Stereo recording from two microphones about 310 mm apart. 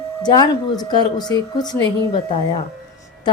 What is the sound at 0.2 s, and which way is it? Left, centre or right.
Speech, centre.